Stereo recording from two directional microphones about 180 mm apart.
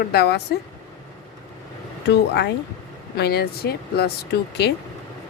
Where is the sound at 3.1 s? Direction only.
65° left (ahead or behind).